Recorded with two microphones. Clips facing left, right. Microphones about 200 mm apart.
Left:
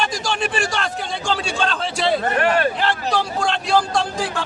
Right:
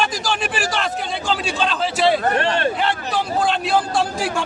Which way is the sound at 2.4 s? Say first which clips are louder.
Left 3 dB; 25° right (ahead or behind).